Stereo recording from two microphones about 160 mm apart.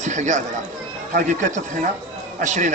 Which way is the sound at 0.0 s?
50° right (ahead or behind).